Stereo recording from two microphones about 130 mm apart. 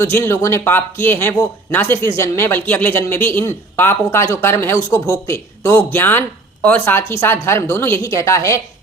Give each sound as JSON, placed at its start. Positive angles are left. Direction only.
{"t": 0.0, "sound": "speech", "side_deg": 20}